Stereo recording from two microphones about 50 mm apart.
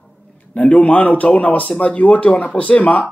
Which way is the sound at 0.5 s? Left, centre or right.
Left.